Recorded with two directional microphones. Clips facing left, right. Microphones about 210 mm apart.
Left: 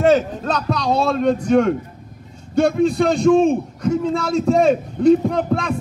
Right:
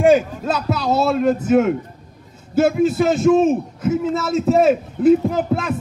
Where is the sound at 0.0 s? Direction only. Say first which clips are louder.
Right 1 dB; 10° right (ahead or behind).